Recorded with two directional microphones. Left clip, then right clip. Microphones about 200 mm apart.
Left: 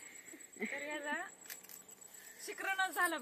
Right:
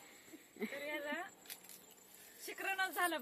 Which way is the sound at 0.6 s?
10° right (ahead or behind).